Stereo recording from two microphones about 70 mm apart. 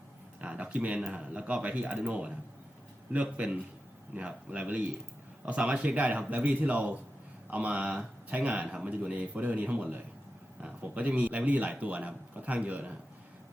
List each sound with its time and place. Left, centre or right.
0.4 s speech: centre